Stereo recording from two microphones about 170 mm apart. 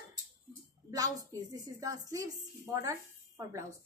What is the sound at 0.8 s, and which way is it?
A woman's voice, 20° right (ahead or behind).